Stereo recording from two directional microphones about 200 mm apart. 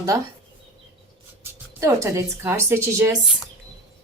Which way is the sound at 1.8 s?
15° right (ahead or behind).